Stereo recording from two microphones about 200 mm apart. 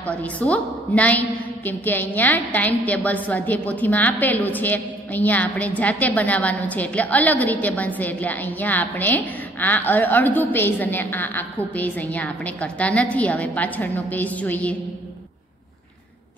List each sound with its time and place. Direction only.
0.0 s a woman's voice: 5° left (ahead or behind)